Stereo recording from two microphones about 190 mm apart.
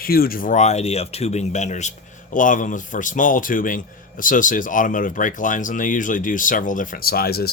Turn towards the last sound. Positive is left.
turn(degrees=55)  # may be behind; listen again after turning